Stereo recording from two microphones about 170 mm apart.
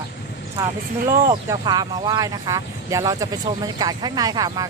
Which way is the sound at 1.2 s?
20° right (ahead or behind).